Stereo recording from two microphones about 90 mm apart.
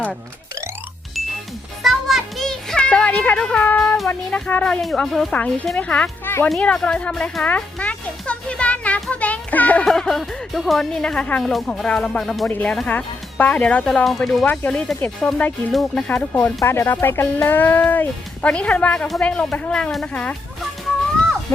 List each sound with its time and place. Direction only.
1.8 s music: centre (ahead or behind); by 3.9 s 15° left (ahead or behind)
4.1 s speech: 15° left (ahead or behind)
5.3 s speech: 15° left (ahead or behind)
7.4 s music: 15° left (ahead or behind)
9.8 s speech: 5° left (ahead or behind)
12.5 s speech: 20° left (ahead or behind)
12.7 s speech: 10° left (ahead or behind)
14.0 s speech: centre (ahead or behind)
14.4 s speech: 15° left (ahead or behind)
16.0 s speech: 20° left (ahead or behind)